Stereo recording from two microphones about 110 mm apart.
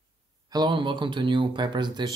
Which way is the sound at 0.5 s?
40° right (ahead or behind).